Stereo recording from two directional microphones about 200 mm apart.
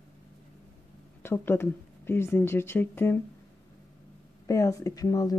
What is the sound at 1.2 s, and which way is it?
Speech, 10° left (ahead or behind).